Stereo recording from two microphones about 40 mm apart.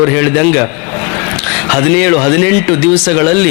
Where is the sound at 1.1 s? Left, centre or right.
Left.